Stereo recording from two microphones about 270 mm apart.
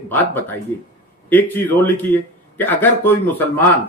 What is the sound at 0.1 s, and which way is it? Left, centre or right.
Speech, centre.